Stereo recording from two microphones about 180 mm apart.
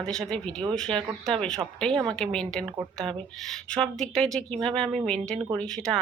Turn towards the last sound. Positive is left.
turn(degrees=5)  # may be behind; listen again after turning